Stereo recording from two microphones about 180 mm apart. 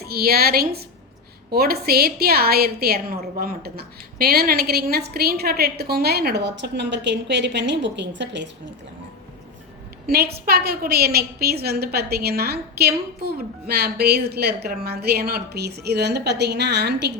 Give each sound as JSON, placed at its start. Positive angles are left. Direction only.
{"t": 0.0, "sound": "a woman's voice", "side_deg": -60}
{"t": 10.1, "sound": "a woman's voice", "side_deg": -60}